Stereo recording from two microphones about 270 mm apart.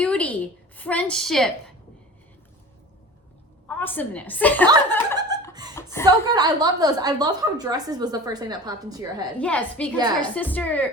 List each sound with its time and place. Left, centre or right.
0.0 s a sound: centre
0.8 s a woman's voice: centre
3.7 s a woman's voice: centre
5.7 s chuckle: centre
6.1 s a woman's voice: centre
9.4 s a woman's voice: centre